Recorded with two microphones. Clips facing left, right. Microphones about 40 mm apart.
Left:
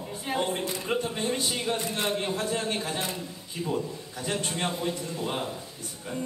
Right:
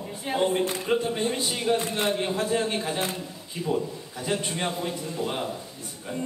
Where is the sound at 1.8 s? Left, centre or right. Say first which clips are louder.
Right 3 dB; right.